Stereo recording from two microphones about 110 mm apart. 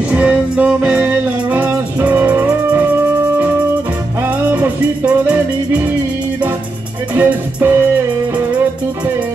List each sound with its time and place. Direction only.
0.1 s music: 10° right (ahead or behind)
4.5 s music: 15° right (ahead or behind)
7.2 s music: 20° right (ahead or behind)